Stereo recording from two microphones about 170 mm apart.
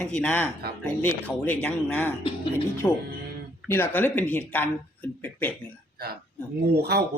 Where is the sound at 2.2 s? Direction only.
30° left (ahead or behind).